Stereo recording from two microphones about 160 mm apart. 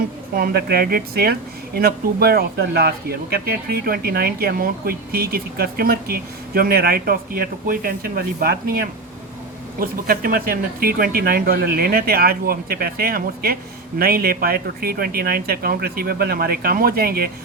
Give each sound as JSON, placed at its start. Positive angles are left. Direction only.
{"t": 0.3, "sound": "speech", "side_deg": -70}